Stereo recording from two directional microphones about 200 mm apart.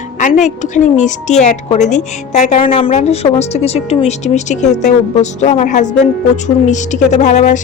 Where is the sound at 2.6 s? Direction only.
25° left (ahead or behind).